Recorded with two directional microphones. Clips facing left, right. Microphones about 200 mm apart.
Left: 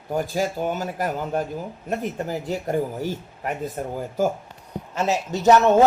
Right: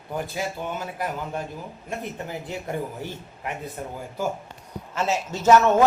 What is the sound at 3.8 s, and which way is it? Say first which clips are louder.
Speech: left 5 dB; 45° left (ahead or behind).